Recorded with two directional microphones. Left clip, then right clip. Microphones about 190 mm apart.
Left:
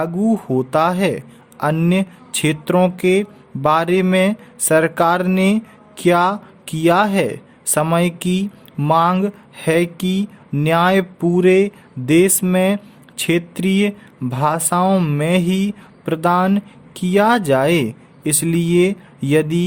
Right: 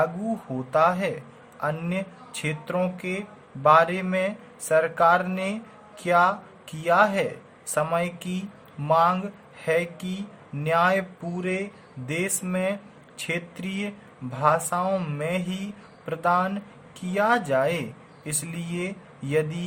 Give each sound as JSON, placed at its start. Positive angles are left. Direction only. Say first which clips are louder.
{"t": 0.5, "sound": "speech", "louder": "left 4 dB", "side_deg": 55}